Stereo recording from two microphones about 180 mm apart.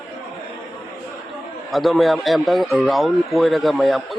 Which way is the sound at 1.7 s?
Centre (ahead or behind).